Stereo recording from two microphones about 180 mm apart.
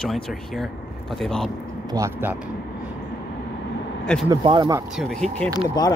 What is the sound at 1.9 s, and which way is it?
Speech, 15° right (ahead or behind).